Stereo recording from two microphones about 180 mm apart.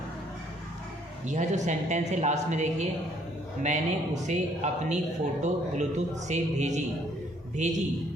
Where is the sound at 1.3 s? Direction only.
40° right (ahead or behind).